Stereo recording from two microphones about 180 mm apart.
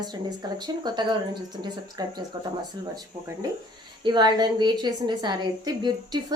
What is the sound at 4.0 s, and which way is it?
A woman's voice, 25° right (ahead or behind).